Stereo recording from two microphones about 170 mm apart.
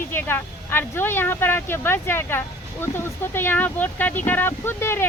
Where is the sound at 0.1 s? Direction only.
10° left (ahead or behind).